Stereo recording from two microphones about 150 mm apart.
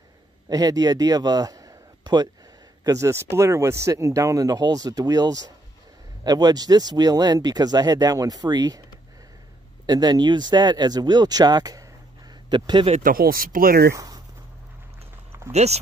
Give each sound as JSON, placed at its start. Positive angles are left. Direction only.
{"t": 0.5, "sound": "a man's voice", "side_deg": -25}
{"t": 9.8, "sound": "speech", "side_deg": -25}
{"t": 13.0, "sound": "speech", "side_deg": -75}
{"t": 13.9, "sound": "a sound", "side_deg": -25}
{"t": 15.5, "sound": "speech", "side_deg": -45}